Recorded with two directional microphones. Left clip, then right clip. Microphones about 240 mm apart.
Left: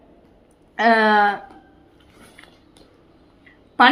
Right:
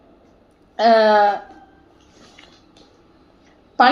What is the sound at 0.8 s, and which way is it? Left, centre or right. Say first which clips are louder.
Speech: right 2 dB; left.